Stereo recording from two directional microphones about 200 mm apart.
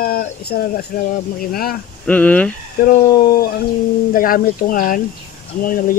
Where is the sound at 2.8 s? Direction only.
45° left (ahead or behind).